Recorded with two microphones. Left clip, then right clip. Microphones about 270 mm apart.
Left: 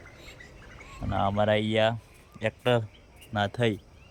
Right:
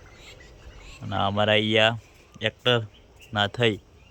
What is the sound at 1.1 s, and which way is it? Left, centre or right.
Speech, centre.